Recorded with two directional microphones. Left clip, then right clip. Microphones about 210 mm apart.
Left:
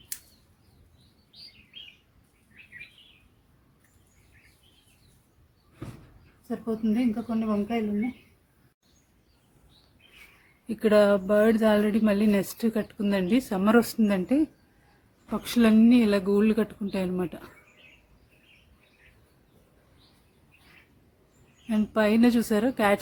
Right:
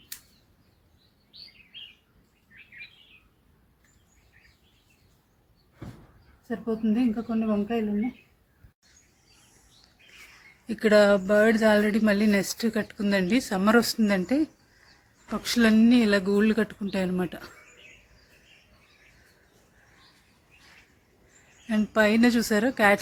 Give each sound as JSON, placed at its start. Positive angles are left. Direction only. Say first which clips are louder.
{"t": 6.5, "sound": "speech", "louder": "right 1 dB", "side_deg": 15}
{"t": 10.7, "sound": "speech", "louder": "right 1 dB", "side_deg": 0}
{"t": 21.7, "sound": "speech", "louder": "right 2 dB", "side_deg": -5}